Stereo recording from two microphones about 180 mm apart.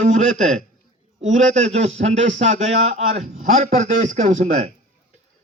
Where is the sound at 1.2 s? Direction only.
40° right (ahead or behind).